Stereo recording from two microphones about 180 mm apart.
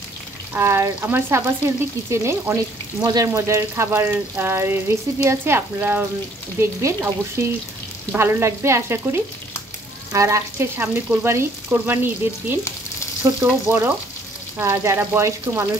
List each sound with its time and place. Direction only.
0.6 s frying: 15° right (ahead or behind)
8.1 s frying: 15° right (ahead or behind)